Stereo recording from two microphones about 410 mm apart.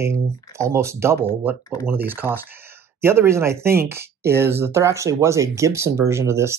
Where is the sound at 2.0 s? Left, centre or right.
Centre.